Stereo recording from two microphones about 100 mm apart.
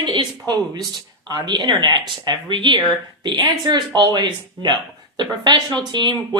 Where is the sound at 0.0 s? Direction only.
50° right (ahead or behind).